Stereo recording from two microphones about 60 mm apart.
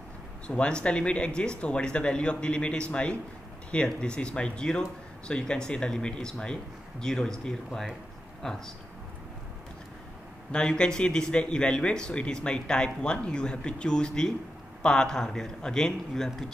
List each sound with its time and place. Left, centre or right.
0.5 s speech: centre
10.5 s speech: centre